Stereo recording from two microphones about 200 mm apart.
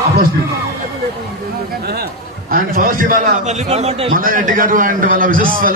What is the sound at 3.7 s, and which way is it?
A man's voice, 30° right (ahead or behind).